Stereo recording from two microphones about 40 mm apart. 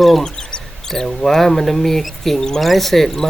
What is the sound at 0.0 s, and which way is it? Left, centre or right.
Speech, centre.